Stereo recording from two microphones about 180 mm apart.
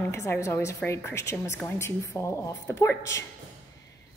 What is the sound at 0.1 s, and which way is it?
Speech, 15° left (ahead or behind).